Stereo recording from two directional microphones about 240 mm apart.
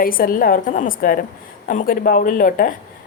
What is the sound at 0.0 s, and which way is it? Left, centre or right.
Speech, left.